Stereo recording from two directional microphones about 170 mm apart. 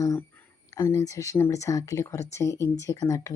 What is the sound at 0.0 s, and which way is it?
Speech, 15° left (ahead or behind).